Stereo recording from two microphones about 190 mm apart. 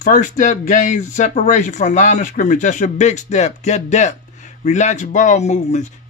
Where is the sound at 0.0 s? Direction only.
40° left (ahead or behind).